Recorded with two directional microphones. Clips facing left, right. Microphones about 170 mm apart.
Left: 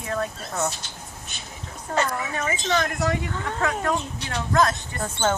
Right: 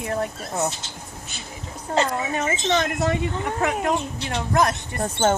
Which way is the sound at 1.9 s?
25° right (ahead or behind).